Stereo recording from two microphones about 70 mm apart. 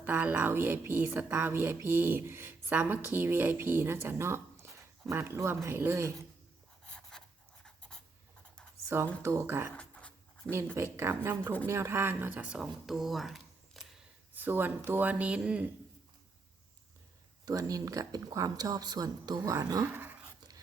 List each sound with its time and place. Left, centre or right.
0.0 s a woman's voice: right
7.2 s writing: centre
9.2 s a woman's voice: right
9.7 s a sound: centre
10.8 s a woman's voice: right
12.4 s speech: centre
12.8 s a sound: centre
14.3 s speech: right
17.4 s speech: right
19.9 s dog: right